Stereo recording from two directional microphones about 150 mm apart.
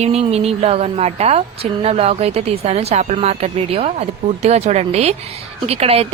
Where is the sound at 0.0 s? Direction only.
45° right (ahead or behind).